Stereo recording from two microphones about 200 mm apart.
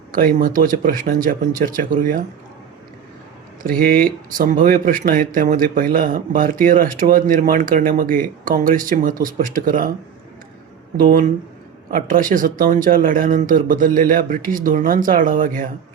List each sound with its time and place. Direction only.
0.1 s speech: 45° right (ahead or behind)
3.6 s speech: 45° right (ahead or behind)
10.9 s speech: 45° right (ahead or behind)